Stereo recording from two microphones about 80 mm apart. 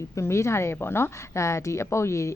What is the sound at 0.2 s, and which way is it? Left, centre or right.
Speech, left.